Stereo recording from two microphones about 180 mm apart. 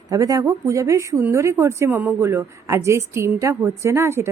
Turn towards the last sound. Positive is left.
turn(degrees=-15)  # may be behind; listen again after turning